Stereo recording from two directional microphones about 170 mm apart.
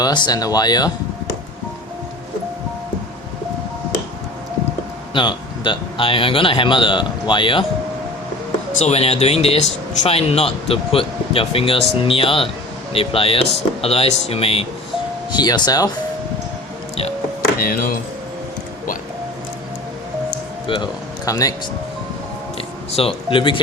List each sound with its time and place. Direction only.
0.0 s speech: 25° left (ahead or behind)
5.1 s speech: 25° left (ahead or behind)
8.8 s speech: 40° left (ahead or behind); by 15.9 s 20° left (ahead or behind)
17.6 s speech: 60° left (ahead or behind)
20.7 s speech: 25° left (ahead or behind)
22.5 s a sound: 35° left (ahead or behind)